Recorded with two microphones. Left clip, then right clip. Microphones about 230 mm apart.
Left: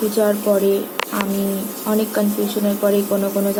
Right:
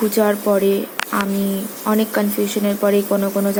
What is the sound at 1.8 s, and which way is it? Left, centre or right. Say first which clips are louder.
Speech: right 1 dB; right.